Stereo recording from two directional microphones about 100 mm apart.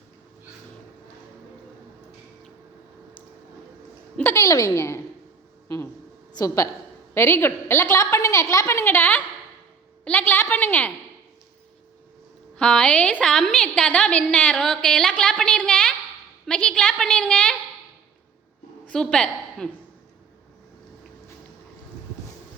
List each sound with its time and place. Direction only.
4.2 s a woman's voice: 25° left (ahead or behind)
4.4 s a woman's voice: 35° left (ahead or behind)
5.6 s a sound: 30° left (ahead or behind)
6.3 s a woman's voice: 30° left (ahead or behind)
8.8 s a woman's voice: 20° left (ahead or behind)
12.5 s a woman's voice: 10° left (ahead or behind)
18.9 s a woman's voice: 10° left (ahead or behind)